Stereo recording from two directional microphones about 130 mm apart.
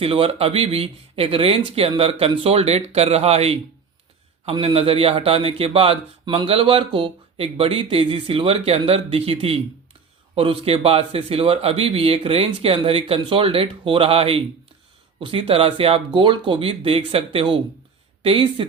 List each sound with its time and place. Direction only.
0.0 s a man's voice: 50° right (ahead or behind)
4.6 s a man's voice: 50° right (ahead or behind)